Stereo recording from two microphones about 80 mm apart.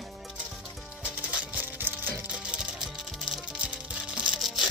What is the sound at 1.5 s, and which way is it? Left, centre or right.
Patter, right.